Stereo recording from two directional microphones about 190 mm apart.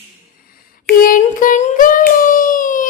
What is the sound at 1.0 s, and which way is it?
Singing, 45° left (ahead or behind).